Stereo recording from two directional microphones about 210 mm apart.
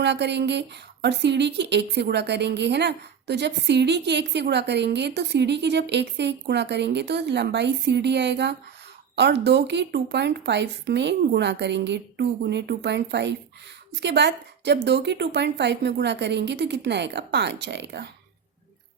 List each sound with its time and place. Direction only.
0.0 s speech: 55° right (ahead or behind)